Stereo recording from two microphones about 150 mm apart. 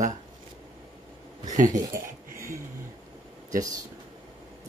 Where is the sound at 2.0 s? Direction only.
65° right (ahead or behind).